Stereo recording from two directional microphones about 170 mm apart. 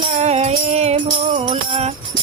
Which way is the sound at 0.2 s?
40° right (ahead or behind).